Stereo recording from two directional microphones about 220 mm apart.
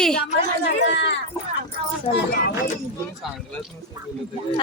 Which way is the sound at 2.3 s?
40° left (ahead or behind).